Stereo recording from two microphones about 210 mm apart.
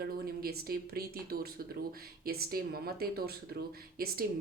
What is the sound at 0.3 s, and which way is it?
Speech, 45° right (ahead or behind).